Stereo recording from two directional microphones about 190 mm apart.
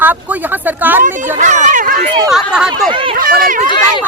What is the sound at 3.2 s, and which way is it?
Speech, 50° right (ahead or behind).